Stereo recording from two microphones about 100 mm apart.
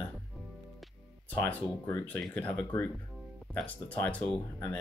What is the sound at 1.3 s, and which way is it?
Speech, 15° left (ahead or behind).